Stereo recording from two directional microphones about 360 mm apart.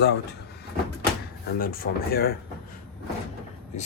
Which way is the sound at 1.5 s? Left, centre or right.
Left.